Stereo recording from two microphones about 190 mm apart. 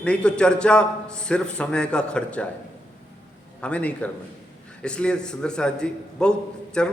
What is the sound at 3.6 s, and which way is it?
A man's voice, 5° left (ahead or behind).